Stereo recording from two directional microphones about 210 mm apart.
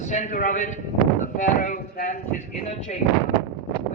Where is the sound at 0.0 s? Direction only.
35° left (ahead or behind).